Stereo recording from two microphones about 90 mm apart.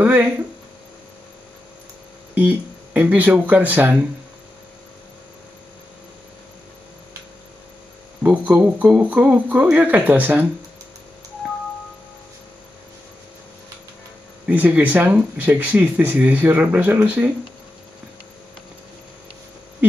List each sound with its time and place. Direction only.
0.0 s hum: 20° right (ahead or behind)
2.3 s speech: 20° right (ahead or behind)
8.2 s speech: 15° right (ahead or behind)
14.5 s speech: 20° right (ahead or behind)